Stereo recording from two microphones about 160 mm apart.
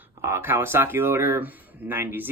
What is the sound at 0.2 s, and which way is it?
Speech, 15° right (ahead or behind).